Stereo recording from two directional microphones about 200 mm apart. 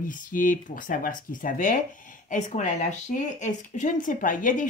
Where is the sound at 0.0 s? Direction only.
40° left (ahead or behind).